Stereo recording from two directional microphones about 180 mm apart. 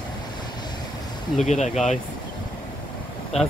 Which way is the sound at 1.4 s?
40° left (ahead or behind).